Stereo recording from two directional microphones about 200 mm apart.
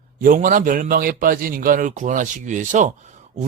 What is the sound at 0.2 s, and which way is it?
A man's voice, 40° right (ahead or behind).